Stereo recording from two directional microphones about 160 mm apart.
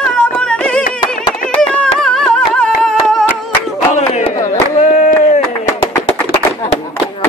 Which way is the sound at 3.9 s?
45° left (ahead or behind).